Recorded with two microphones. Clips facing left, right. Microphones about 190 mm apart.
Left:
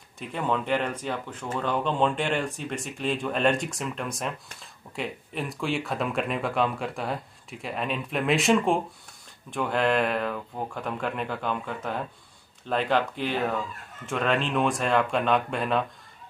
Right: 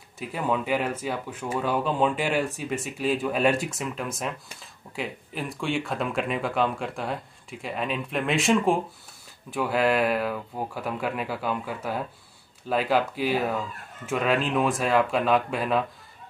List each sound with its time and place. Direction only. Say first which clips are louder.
0.2 s speech: right 1 dB; 5° right (ahead or behind)